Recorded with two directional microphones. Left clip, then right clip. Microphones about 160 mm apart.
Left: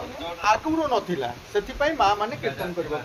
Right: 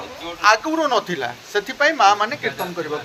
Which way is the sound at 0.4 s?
15° right (ahead or behind).